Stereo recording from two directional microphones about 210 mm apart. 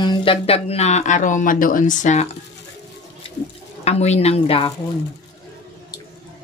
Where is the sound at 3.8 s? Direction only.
30° left (ahead or behind).